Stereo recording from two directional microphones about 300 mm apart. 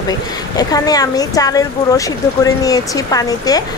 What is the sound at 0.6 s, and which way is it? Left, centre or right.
Speech, centre.